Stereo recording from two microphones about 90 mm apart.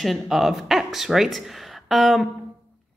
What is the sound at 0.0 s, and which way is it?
A woman's voice, centre (ahead or behind).